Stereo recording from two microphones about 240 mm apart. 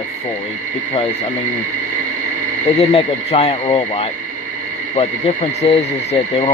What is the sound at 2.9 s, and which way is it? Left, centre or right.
Speech, left.